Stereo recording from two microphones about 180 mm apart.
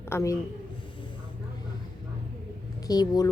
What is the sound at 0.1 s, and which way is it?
Speech, 15° left (ahead or behind).